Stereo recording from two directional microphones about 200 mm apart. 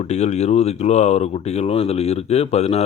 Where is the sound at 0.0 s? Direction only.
35° left (ahead or behind).